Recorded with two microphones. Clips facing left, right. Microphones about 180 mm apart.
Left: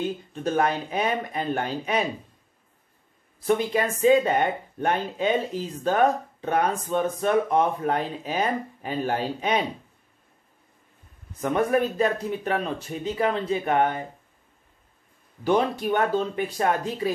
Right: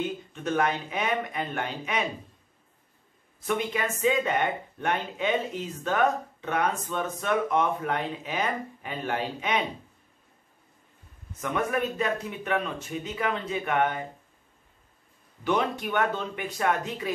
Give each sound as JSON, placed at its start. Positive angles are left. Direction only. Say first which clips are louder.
{"t": 0.3, "sound": "speech", "louder": "left 3 dB", "side_deg": 35}
{"t": 3.4, "sound": "speech", "louder": "left 5 dB", "side_deg": 35}
{"t": 11.4, "sound": "speech", "louder": "left 5 dB", "side_deg": 35}
{"t": 15.4, "sound": "speech", "louder": "left 4 dB", "side_deg": 35}